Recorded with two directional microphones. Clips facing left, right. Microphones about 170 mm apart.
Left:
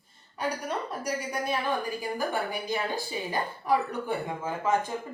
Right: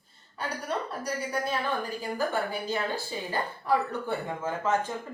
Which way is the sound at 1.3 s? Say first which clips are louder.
Left 1 dB; 15° left (ahead or behind).